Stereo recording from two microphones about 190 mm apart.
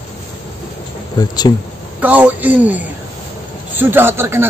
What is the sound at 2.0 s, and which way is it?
Speech, 10° right (ahead or behind).